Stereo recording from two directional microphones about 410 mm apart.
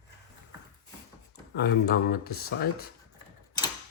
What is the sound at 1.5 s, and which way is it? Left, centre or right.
Speech, left.